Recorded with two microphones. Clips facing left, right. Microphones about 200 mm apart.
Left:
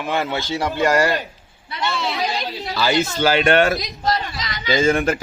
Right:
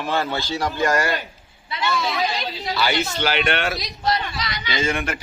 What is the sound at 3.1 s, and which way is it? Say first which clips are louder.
A man's voice: left 6 dB; 40° left (ahead or behind).